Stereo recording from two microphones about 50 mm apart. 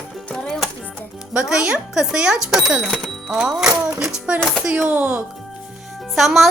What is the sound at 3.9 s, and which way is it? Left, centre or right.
Child singing, centre.